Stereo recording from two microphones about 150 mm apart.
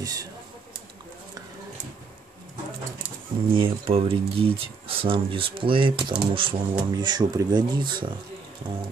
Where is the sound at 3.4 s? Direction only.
35° right (ahead or behind).